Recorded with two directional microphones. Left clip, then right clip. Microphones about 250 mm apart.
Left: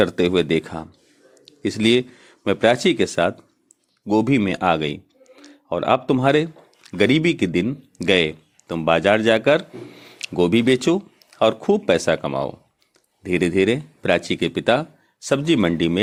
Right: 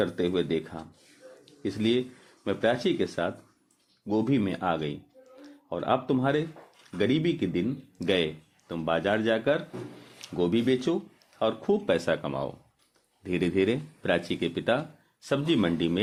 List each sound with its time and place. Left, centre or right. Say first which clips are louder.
0.0 s speech: left 9 dB; left